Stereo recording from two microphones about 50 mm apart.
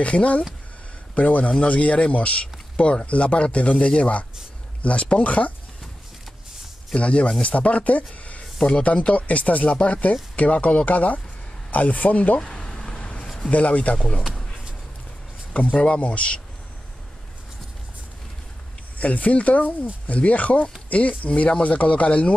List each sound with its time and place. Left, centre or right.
0.0 s a man's voice: left
7.0 s speech: left
12.4 s vehicle: centre
13.2 s a sound: centre
13.5 s speech: left
13.9 s a man's voice: centre
15.7 s speech: left
18.9 s speech: left